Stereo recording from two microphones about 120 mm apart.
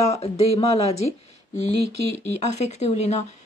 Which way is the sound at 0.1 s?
60° left (ahead or behind).